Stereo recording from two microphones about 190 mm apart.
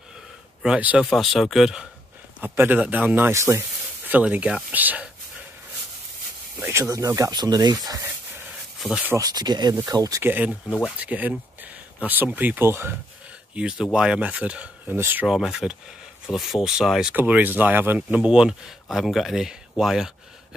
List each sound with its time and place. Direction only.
0.6 s speech: 5° right (ahead or behind)
6.6 s speech: 15° right (ahead or behind)
8.8 s speech: 5° right (ahead or behind)